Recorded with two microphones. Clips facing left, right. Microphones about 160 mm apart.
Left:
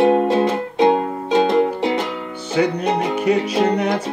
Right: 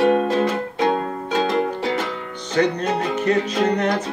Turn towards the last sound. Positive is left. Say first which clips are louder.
# left 2 dB
turn(degrees=10)  # may be behind; listen again after turning